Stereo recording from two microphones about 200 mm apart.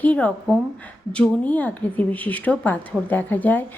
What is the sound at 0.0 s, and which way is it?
Speech, 5° left (ahead or behind).